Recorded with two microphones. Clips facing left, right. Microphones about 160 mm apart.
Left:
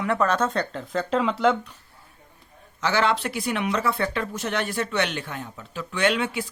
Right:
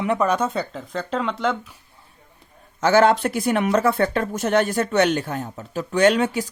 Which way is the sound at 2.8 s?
45° right (ahead or behind).